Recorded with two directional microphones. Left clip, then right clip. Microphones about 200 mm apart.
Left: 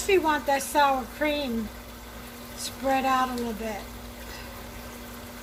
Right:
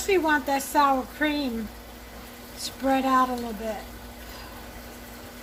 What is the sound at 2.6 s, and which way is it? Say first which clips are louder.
Speech: right 1 dB; 30° right (ahead or behind).